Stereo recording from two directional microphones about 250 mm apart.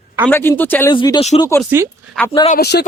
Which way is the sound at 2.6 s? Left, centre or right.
Left.